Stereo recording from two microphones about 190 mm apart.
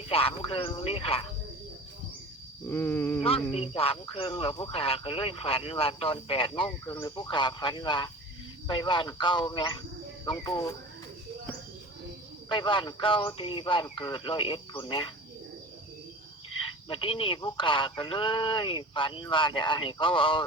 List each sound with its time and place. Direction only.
0.1 s speech: 30° left (ahead or behind)
2.6 s a sound: 10° left (ahead or behind)
3.5 s speech: 30° left (ahead or behind)
12.5 s speech: 25° left (ahead or behind)
16.9 s speech: 30° left (ahead or behind)